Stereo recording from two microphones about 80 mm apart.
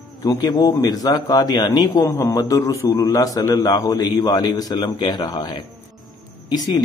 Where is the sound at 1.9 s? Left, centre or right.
Left.